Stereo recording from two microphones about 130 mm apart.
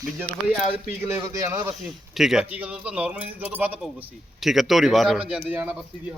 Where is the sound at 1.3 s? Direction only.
25° right (ahead or behind).